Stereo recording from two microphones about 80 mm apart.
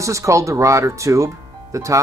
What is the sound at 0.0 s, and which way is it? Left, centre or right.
Speech, right.